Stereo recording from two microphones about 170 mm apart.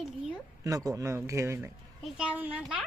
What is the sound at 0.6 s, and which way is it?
A child's voice, 20° right (ahead or behind).